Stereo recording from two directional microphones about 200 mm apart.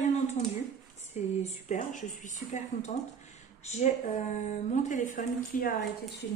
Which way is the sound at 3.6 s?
35° left (ahead or behind).